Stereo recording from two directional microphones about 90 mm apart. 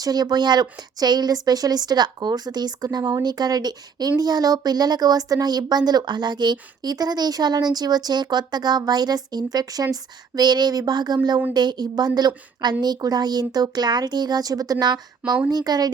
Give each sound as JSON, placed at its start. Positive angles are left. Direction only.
{"t": 0.0, "sound": "speech", "side_deg": -45}